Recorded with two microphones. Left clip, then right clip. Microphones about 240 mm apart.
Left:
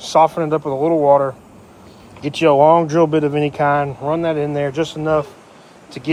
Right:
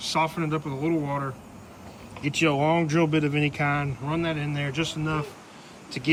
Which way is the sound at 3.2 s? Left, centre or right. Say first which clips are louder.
Left 9 dB; right.